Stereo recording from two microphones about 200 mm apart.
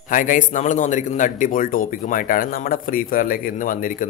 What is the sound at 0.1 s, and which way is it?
A man's voice, 40° left (ahead or behind).